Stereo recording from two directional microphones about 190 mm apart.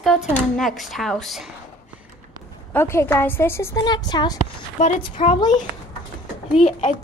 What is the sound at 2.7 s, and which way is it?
A woman's voice, 10° left (ahead or behind).